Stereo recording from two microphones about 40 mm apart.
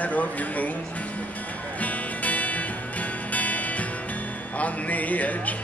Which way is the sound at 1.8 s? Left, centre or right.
Left.